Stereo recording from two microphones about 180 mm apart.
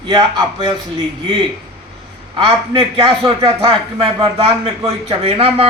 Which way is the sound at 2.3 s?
25° right (ahead or behind).